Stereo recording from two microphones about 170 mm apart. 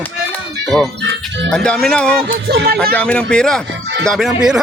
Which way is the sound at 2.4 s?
70° right (ahead or behind).